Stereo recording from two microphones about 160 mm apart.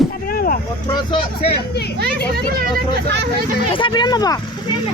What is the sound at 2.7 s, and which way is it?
Speech, 80° right.